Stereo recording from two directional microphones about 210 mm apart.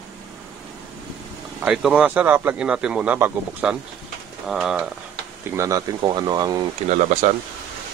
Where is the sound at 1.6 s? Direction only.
5° right (ahead or behind).